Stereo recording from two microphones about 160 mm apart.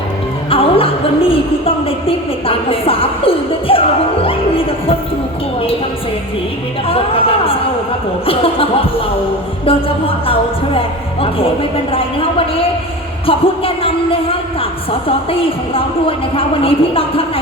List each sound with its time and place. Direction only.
0.5 s a woman's voice: 35° left (ahead or behind)
6.8 s a woman's voice: 35° left (ahead or behind)
13.2 s a woman's voice: 35° left (ahead or behind)